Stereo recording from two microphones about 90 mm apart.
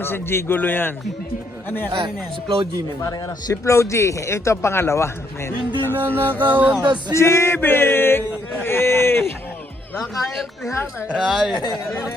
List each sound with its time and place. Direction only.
0.0 s male singing: 25° left (ahead or behind)
1.9 s a man's voice: 65° right (ahead or behind)
3.0 s speech: 40° left (ahead or behind)
5.9 s music: 25° right (ahead or behind)
7.1 s male singing: 30° left (ahead or behind)
10.0 s speech: centre (ahead or behind)
11.5 s speech: 55° left (ahead or behind)